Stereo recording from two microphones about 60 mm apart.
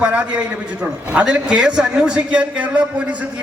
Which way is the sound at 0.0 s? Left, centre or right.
Right.